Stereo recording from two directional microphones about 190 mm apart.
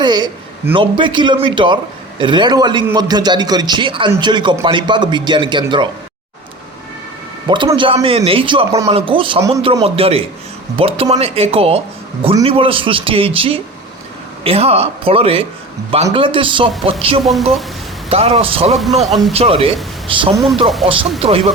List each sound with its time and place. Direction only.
0.0 s a man's voice: 20° right (ahead or behind)
7.4 s a man's voice: 25° right (ahead or behind)
18.7 s speech: centre (ahead or behind)
19.3 s speech: 30° right (ahead or behind)
20.3 s speech: centre (ahead or behind)
20.8 s a man's voice: 30° right (ahead or behind)